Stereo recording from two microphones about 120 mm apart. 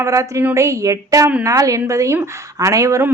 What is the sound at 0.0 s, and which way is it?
Speech, 25° right (ahead or behind).